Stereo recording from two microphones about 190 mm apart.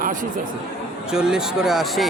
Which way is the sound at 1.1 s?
5° right (ahead or behind).